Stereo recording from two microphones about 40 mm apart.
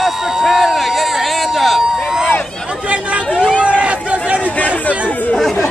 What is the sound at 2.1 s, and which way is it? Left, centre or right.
Run, centre.